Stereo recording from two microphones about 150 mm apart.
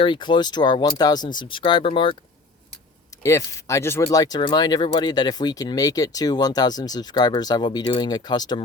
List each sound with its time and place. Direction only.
0.0 s speech: 30° left (ahead or behind)
3.2 s speech: 20° left (ahead or behind)